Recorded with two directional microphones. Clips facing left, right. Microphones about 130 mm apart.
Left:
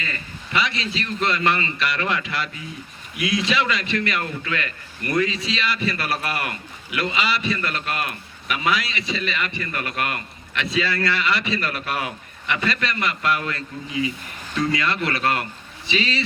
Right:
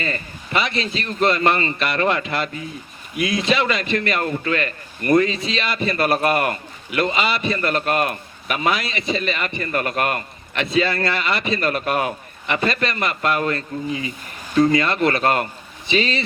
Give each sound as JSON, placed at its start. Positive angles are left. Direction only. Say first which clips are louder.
{"t": 0.0, "sound": "a man's voice", "louder": "right 6 dB", "side_deg": -45}